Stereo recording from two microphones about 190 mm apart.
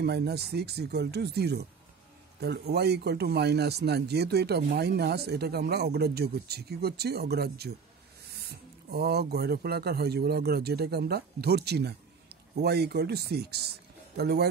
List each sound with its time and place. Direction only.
0.0 s speech: 60° right (ahead or behind)
8.9 s speech: 55° right (ahead or behind)